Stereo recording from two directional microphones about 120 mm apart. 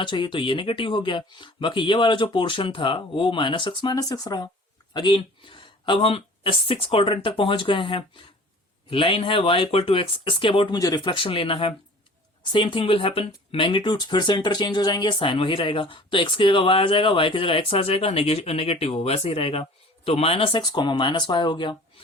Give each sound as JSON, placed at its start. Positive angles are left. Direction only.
{"t": 0.0, "sound": "speech", "side_deg": 40}
{"t": 3.9, "sound": "speech", "side_deg": 30}
{"t": 4.9, "sound": "speech", "side_deg": 40}
{"t": 10.8, "sound": "speech", "side_deg": 30}